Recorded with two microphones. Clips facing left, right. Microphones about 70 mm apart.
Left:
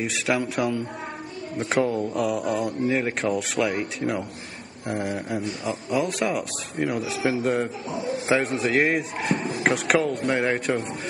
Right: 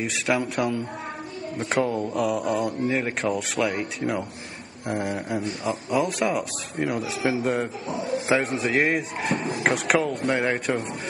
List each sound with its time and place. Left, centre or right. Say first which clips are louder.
0.0 s speech: even; centre